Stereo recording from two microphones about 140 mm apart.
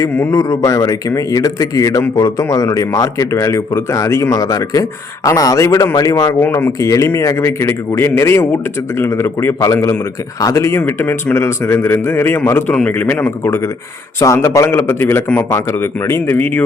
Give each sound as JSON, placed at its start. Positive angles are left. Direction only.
{"t": 0.0, "sound": "a man's voice", "side_deg": 20}